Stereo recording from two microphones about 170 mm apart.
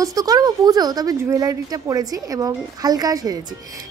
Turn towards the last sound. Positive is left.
turn(degrees=-20)  # may be behind; listen again after turning